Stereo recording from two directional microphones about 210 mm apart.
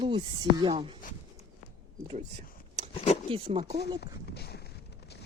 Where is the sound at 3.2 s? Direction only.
25° right (ahead or behind).